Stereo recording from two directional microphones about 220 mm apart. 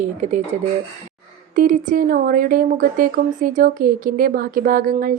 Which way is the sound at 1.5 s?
40° right (ahead or behind).